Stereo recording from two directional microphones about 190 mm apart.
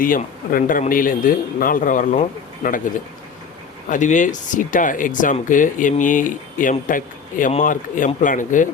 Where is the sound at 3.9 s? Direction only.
40° left (ahead or behind).